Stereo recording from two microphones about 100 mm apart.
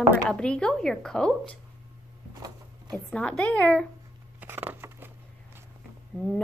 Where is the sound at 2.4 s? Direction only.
40° right (ahead or behind).